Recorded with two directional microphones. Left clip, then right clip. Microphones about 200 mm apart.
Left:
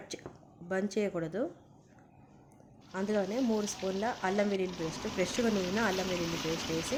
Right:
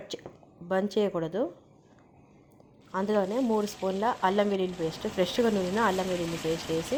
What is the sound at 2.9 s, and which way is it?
Speech, 10° right (ahead or behind).